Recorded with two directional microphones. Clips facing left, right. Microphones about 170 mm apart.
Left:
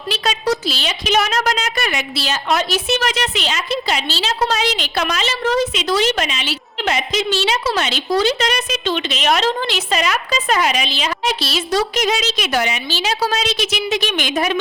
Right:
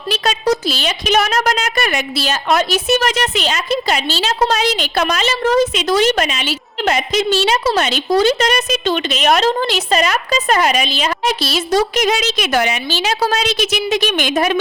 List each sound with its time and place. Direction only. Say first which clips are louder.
0.1 s a woman's voice: right 3 dB; 45° right (ahead or behind)